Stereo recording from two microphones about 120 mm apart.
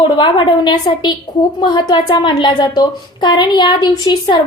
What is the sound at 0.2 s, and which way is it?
A woman's voice, 40° left (ahead or behind).